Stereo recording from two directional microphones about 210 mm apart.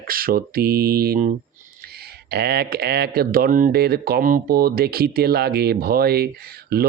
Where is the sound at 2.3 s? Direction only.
50° right (ahead or behind).